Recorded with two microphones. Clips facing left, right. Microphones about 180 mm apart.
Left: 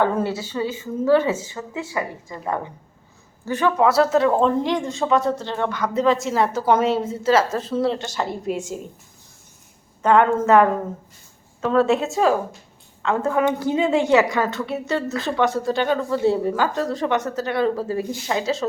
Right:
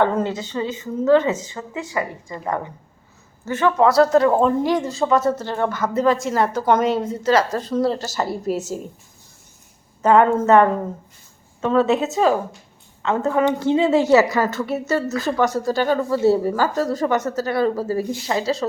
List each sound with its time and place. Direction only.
0.0 s a woman's voice: 10° left (ahead or behind)
3.4 s speech: 15° left (ahead or behind); by 8.4 s 5° right (ahead or behind)
8.4 s a woman's voice: 40° right (ahead or behind)
10.0 s speech: 5° right (ahead or behind)